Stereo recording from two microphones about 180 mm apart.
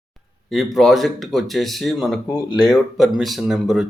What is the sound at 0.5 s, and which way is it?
Speech, centre (ahead or behind).